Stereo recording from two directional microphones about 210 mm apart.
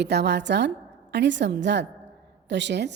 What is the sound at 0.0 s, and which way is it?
A woman's voice, 55° right (ahead or behind).